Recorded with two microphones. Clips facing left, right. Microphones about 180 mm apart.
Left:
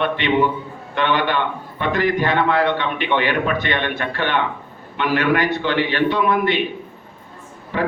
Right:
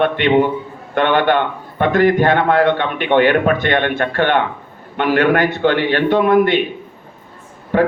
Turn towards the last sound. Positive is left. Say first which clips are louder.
# right 7 dB
turn(degrees=-50)  # may be behind; listen again after turning